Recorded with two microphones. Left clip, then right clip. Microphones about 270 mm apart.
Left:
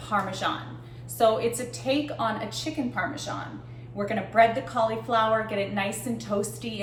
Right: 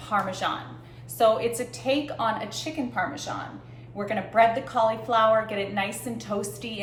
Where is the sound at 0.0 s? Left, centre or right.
Centre.